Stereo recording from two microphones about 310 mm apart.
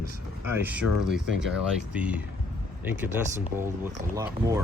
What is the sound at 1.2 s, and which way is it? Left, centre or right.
Speech, right.